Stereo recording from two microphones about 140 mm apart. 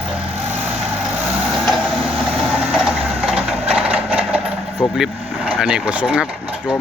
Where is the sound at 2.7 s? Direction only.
5° right (ahead or behind).